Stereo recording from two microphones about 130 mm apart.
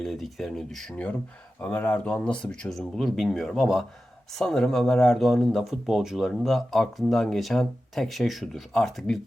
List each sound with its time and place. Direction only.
0.0 s speech: centre (ahead or behind)